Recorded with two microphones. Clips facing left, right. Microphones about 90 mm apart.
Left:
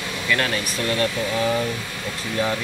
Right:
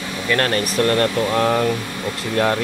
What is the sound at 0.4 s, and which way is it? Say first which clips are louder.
Speech: right 6 dB; 50° right (ahead or behind).